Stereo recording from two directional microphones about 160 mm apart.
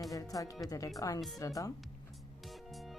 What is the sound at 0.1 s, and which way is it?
Speech, 20° left (ahead or behind).